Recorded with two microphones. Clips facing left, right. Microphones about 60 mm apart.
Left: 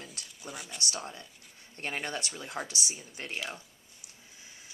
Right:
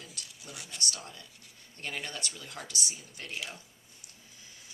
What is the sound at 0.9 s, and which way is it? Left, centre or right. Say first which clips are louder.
Speech: left 6 dB; left.